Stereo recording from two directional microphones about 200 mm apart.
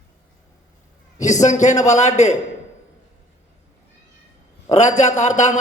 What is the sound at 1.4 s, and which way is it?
Speech, 35° left (ahead or behind).